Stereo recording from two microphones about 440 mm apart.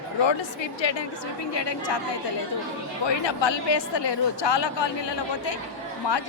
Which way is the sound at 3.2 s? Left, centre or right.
Left.